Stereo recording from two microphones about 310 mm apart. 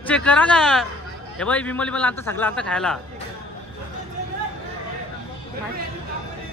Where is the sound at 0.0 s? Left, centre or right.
Centre.